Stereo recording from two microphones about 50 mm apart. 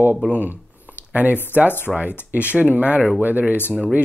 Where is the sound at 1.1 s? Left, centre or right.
Right.